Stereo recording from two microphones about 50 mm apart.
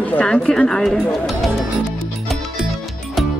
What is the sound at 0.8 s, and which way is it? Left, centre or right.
Speech, centre.